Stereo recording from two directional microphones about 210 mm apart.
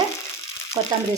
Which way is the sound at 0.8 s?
15° right (ahead or behind).